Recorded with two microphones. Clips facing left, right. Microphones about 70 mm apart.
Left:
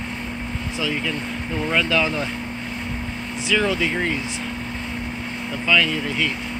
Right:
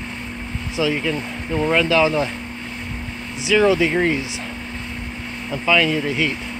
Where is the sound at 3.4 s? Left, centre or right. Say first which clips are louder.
Right 6 dB; centre.